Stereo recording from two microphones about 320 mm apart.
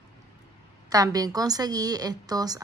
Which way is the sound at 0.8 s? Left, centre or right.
Centre.